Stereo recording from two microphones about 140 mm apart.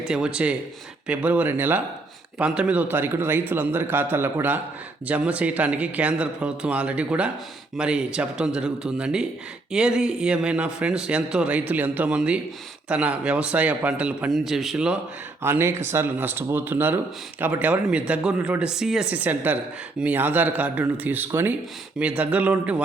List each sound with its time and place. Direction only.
0.0 s a man's voice: 5° right (ahead or behind)
15.4 s speech: 15° right (ahead or behind)